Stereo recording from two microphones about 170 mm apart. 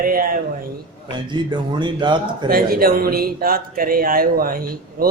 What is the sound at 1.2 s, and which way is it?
Speech, 25° right (ahead or behind).